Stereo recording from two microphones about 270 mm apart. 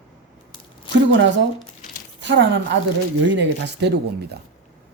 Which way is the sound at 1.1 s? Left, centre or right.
Right.